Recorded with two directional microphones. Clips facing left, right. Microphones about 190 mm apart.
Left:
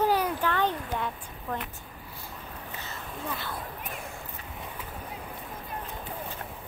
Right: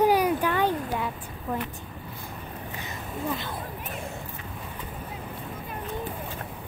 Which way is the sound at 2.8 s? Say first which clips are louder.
Right 6 dB; 15° right (ahead or behind).